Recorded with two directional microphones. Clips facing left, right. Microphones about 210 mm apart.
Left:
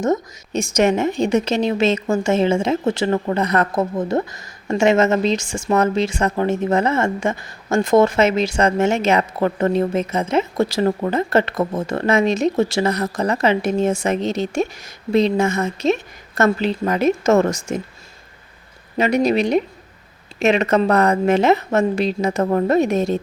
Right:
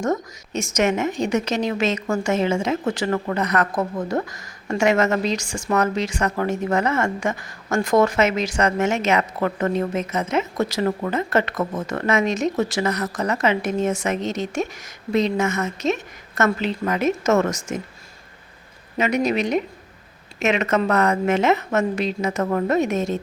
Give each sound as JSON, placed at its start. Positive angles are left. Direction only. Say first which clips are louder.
{"t": 0.5, "sound": "a woman's voice", "louder": "left 4 dB", "side_deg": 30}
{"t": 18.9, "sound": "a woman's voice", "louder": "left 4 dB", "side_deg": 35}